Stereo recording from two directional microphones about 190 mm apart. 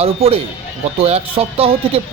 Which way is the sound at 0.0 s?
30° right (ahead or behind).